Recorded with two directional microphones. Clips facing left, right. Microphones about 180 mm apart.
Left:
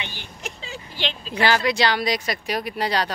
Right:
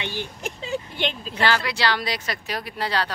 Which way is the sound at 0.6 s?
55° right (ahead or behind).